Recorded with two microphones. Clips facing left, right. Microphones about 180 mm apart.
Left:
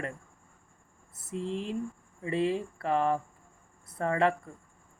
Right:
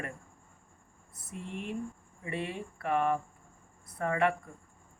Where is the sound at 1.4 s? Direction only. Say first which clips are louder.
Left 7 dB; 90° left.